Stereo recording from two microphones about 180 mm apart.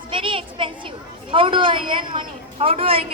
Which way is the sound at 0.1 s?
30° right (ahead or behind).